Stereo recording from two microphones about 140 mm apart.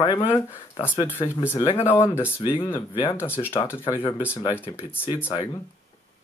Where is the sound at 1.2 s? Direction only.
35° left (ahead or behind).